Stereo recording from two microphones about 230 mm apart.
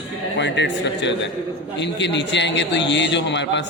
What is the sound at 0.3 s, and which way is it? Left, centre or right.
A man's voice, left.